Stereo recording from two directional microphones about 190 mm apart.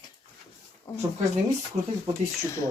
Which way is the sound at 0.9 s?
15° left (ahead or behind).